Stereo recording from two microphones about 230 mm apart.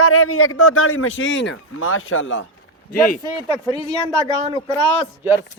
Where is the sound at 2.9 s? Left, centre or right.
Left.